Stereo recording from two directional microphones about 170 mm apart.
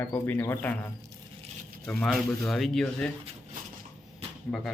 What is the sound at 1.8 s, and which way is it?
Speech, 5° left (ahead or behind).